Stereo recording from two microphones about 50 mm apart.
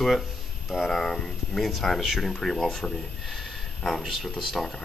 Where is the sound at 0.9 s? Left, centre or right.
Centre.